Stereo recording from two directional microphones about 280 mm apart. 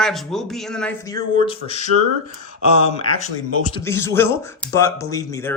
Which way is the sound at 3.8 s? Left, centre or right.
Centre.